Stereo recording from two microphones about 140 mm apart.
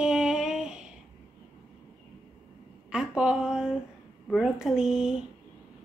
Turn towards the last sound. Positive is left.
turn(degrees=-5)  # may be behind; listen again after turning